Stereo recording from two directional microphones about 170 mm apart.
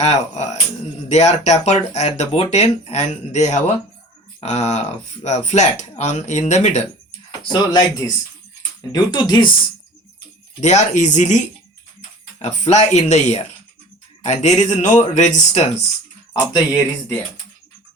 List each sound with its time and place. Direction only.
0.0 s speech: 40° left (ahead or behind)
7.3 s speech: 25° left (ahead or behind)
10.6 s speech: 40° left (ahead or behind)
16.3 s speech: 25° left (ahead or behind)